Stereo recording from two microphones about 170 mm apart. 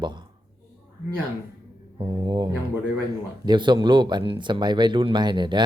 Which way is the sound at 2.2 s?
25° right (ahead or behind).